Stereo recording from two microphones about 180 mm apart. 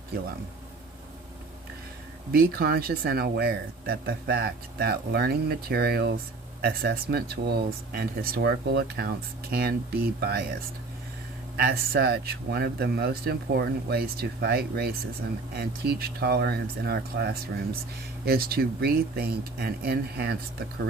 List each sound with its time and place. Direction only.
2.3 s speech: 60° right (ahead or behind)
11.5 s speech: 55° right (ahead or behind)